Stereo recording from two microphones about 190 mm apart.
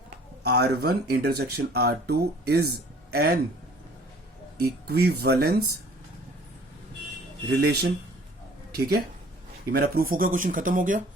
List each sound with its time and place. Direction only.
0.4 s speech: 60° right (ahead or behind)
4.6 s speech: 55° right (ahead or behind)
7.4 s speech: 60° right (ahead or behind); by 11.0 s 45° right (ahead or behind)